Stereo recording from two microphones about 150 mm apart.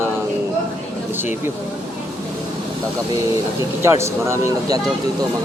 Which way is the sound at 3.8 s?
20° right (ahead or behind).